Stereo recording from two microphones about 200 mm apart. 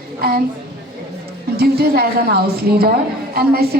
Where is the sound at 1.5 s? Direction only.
50° right (ahead or behind).